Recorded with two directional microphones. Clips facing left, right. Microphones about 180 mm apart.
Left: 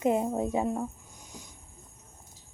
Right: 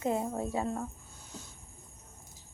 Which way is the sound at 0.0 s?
20° left (ahead or behind).